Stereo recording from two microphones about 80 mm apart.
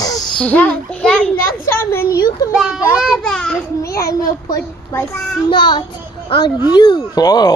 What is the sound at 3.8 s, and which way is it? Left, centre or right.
Speech, left.